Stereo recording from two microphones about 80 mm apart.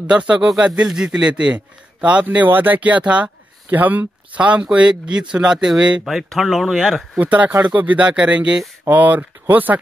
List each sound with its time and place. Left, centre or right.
0.0 s a man's voice: centre
6.0 s speech: centre
7.2 s a man's voice: centre